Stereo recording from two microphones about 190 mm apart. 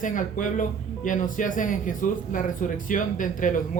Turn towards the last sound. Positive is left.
turn(degrees=45)  # may be behind; listen again after turning